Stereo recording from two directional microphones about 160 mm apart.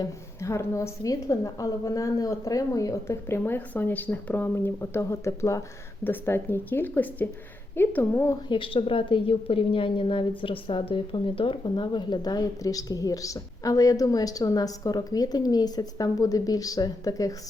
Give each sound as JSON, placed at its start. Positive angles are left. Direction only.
{"t": 0.0, "sound": "a woman's voice", "side_deg": 20}
{"t": 8.4, "sound": "a woman's voice", "side_deg": 35}